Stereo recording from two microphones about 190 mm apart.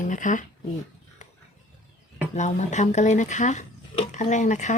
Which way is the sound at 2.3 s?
40° left (ahead or behind).